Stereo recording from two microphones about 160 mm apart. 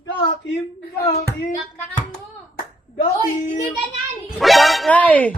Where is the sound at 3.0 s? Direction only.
45° left (ahead or behind).